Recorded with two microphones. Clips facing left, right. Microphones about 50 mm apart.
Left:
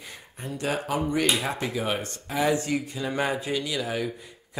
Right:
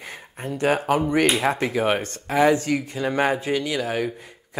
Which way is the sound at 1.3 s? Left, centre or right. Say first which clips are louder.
Right 5 dB; right.